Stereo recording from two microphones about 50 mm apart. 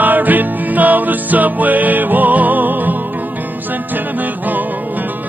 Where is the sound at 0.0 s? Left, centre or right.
Right.